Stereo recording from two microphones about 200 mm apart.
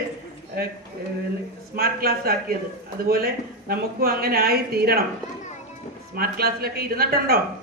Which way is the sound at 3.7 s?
50° right (ahead or behind).